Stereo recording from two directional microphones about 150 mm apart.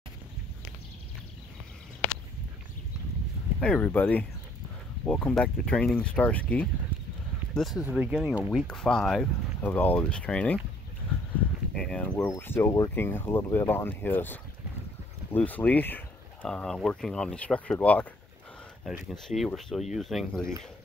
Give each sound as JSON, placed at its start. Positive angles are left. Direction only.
{"t": 3.6, "sound": "speech", "side_deg": 10}
{"t": 7.5, "sound": "speech", "side_deg": 0}
{"t": 11.7, "sound": "speech", "side_deg": 5}
{"t": 18.9, "sound": "speech", "side_deg": 0}